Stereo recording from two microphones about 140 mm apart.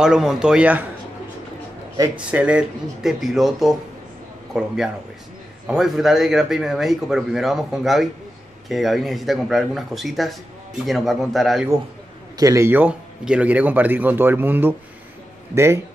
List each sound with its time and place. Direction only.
0.0 s speech: 5° right (ahead or behind)
2.1 s speech: 10° right (ahead or behind)
12.4 s a man's voice: 20° right (ahead or behind)